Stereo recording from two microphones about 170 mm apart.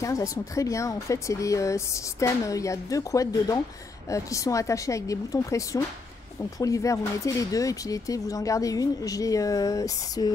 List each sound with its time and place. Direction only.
0.0 s speech: 20° left (ahead or behind)